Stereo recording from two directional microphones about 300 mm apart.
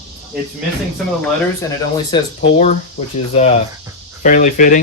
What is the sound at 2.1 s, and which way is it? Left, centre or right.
Speech, left.